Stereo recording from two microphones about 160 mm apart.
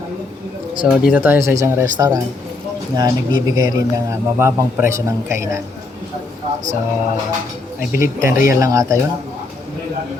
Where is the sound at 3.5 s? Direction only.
20° right (ahead or behind).